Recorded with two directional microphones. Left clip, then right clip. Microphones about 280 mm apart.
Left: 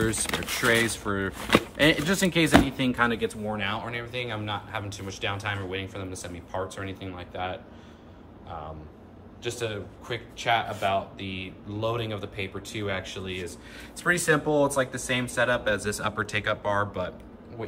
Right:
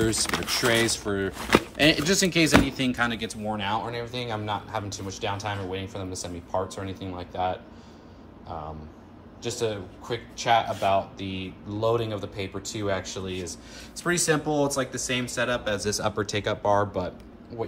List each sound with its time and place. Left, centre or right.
0.0 s speech: centre
9.4 s a man's voice: centre
12.4 s speech: right
12.8 s a man's voice: centre